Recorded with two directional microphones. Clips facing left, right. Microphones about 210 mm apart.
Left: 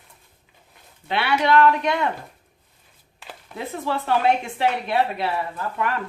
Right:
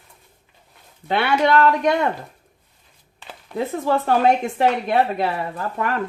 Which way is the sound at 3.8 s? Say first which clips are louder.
Right 3 dB; 45° right (ahead or behind).